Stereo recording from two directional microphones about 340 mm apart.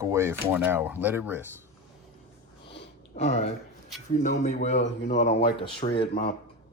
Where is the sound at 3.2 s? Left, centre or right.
Centre.